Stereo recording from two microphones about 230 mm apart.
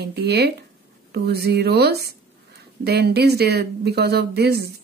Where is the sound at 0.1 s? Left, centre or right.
Right.